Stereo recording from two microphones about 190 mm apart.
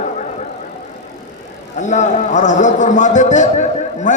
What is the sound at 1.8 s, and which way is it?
A man's voice, 40° left (ahead or behind).